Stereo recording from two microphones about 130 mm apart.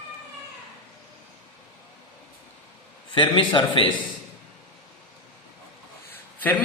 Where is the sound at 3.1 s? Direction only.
40° left (ahead or behind).